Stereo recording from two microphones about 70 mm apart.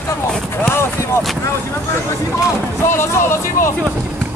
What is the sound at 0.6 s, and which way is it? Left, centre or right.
Speech, left.